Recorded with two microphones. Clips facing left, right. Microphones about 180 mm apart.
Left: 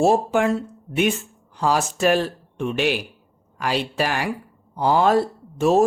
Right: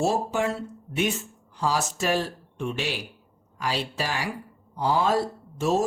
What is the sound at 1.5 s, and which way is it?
Speech, 60° left (ahead or behind).